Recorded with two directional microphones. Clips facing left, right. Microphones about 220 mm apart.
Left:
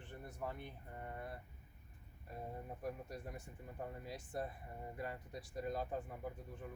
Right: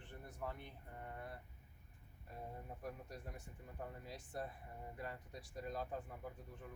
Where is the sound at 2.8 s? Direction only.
10° left (ahead or behind).